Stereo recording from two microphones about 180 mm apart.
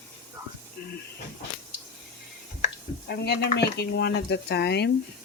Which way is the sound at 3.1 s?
65° left (ahead or behind).